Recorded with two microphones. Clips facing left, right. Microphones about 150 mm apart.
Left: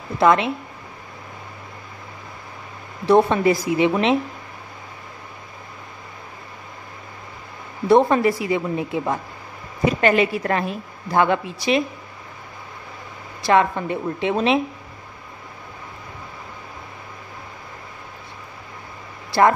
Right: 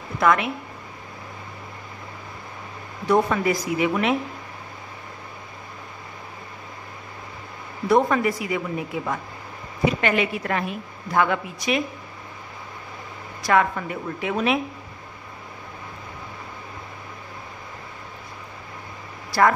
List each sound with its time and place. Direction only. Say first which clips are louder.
0.2 s a woman's voice: left 4 dB; 25° left (ahead or behind)
3.1 s a woman's voice: left 5 dB; 30° left (ahead or behind)
7.9 s a woman's voice: left 4 dB; 30° left (ahead or behind)
13.4 s a woman's voice: left 3 dB; 25° left (ahead or behind)